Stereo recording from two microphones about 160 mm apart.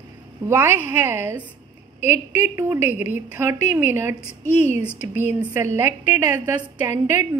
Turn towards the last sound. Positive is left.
turn(degrees=-15)  # may be behind; listen again after turning